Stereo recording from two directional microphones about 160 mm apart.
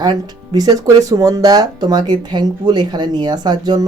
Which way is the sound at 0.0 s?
25° right (ahead or behind).